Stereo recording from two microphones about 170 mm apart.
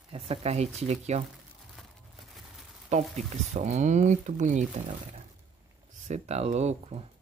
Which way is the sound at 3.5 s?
40° right (ahead or behind).